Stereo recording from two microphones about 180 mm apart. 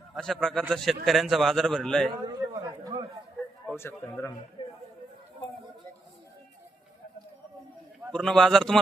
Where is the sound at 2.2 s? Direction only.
20° right (ahead or behind).